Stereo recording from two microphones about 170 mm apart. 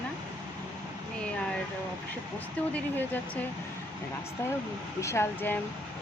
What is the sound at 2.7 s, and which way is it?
Speech, 10° left (ahead or behind).